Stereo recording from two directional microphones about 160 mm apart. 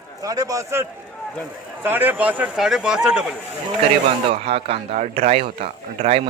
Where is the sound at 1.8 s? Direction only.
10° right (ahead or behind).